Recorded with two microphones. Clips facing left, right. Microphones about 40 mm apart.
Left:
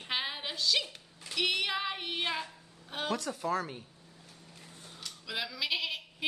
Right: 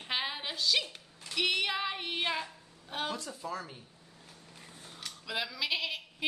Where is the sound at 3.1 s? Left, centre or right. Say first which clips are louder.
Left 5 dB; left.